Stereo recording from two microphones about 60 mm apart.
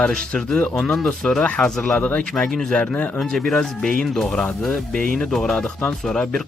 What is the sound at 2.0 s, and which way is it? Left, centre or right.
Speech, left.